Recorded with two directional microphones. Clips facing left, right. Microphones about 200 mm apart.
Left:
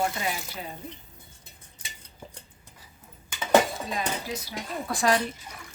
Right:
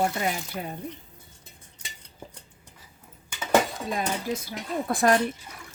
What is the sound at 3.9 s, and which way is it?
Speech, 50° right (ahead or behind).